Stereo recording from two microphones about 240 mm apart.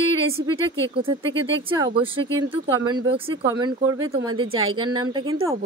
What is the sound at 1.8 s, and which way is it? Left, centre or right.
Speech, right.